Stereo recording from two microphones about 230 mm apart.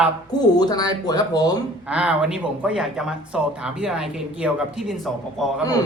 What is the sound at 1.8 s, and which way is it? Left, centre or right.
Speech, centre.